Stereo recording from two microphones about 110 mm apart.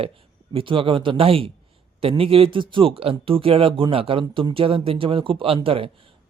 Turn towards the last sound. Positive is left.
turn(degrees=-55)  # may be behind; listen again after turning